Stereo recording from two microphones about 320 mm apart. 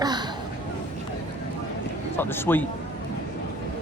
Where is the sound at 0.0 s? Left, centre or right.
Centre.